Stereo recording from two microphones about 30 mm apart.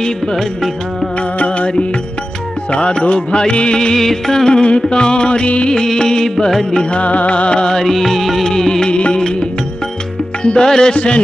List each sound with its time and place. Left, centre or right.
2.7 s music: left
3.9 s music: centre
4.5 s music: left
5.9 s music: left
6.9 s music: left
7.8 s music: centre
8.5 s music: left
8.8 s music: left
10.4 s music: left